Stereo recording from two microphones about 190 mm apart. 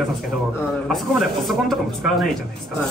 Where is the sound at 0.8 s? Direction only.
Centre (ahead or behind).